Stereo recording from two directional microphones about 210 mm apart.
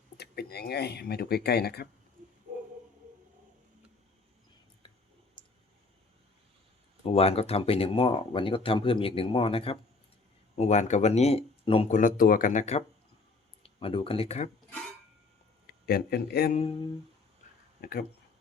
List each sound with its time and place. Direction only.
0.2 s speech: 50° left (ahead or behind)
7.0 s speech: 30° left (ahead or behind)
11.9 s speech: 40° left (ahead or behind)
15.6 s speech: 50° left (ahead or behind)
17.7 s speech: 45° left (ahead or behind)